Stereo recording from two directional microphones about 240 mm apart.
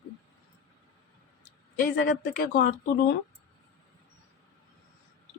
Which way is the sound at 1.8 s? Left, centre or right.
Left.